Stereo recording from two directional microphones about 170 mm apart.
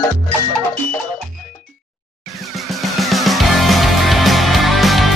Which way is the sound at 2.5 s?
Centre (ahead or behind).